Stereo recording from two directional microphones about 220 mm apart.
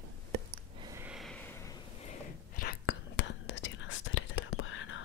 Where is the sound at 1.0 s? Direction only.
Centre (ahead or behind).